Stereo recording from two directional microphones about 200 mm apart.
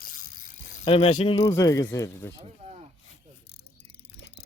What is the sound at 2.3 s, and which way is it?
Speech, 25° right (ahead or behind).